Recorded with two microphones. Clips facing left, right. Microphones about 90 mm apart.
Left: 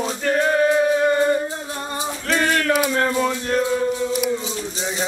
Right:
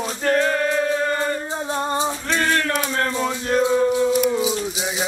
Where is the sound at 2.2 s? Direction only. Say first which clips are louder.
Left 5 dB; 10° left (ahead or behind).